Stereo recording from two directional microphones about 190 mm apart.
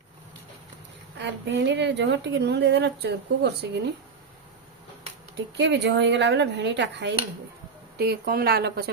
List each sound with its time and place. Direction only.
1.2 s a woman's voice: 65° right (ahead or behind)
5.5 s a woman's voice: 65° right (ahead or behind)